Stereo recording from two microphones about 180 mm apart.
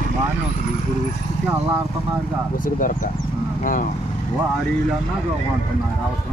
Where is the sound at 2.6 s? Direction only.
50° left (ahead or behind).